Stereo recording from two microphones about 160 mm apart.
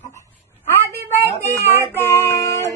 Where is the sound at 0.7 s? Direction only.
15° left (ahead or behind).